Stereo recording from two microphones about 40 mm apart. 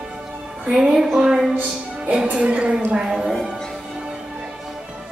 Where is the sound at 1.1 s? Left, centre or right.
Centre.